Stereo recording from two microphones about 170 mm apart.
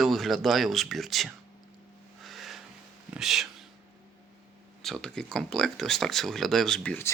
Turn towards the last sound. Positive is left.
turn(degrees=10)  # may be behind; listen again after turning